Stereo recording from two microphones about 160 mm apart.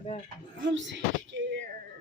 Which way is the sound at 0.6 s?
90° right.